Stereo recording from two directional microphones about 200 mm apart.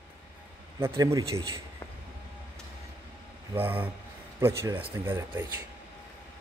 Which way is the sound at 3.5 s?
10° right (ahead or behind).